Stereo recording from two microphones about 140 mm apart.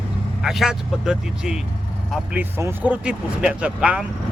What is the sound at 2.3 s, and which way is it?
Speech, 15° right (ahead or behind).